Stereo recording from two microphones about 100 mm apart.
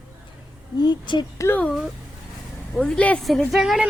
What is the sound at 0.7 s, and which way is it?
Speech, 45° left (ahead or behind).